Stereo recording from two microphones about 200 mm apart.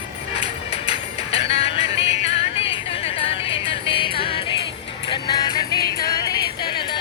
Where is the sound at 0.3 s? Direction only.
30° left (ahead or behind).